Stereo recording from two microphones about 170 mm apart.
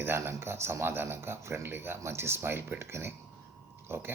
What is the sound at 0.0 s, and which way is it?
Speech, 15° right (ahead or behind).